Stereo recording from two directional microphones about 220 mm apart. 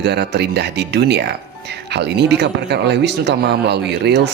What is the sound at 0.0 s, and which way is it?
Speech, 50° right (ahead or behind).